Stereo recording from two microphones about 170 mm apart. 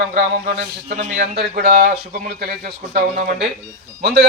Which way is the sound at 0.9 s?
50° right (ahead or behind).